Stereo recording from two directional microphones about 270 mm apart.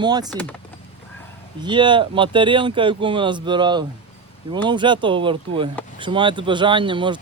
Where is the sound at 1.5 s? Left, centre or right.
Centre.